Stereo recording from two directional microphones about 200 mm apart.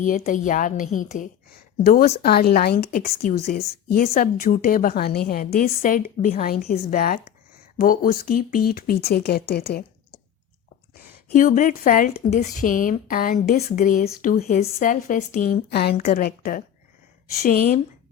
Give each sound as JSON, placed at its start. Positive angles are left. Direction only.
{"t": 0.0, "sound": "a woman's voice", "side_deg": 40}
{"t": 1.5, "sound": "a woman's voice", "side_deg": 50}